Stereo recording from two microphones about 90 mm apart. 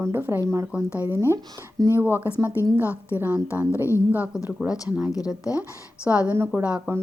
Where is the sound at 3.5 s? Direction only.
20° right (ahead or behind).